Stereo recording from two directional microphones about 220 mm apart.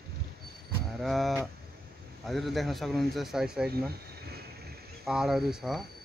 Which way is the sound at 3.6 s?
45° right (ahead or behind).